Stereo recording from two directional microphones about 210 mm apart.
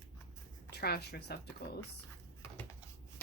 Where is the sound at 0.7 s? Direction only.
50° left (ahead or behind).